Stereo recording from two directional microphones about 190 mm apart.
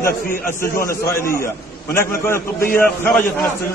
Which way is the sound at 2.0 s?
10° left (ahead or behind).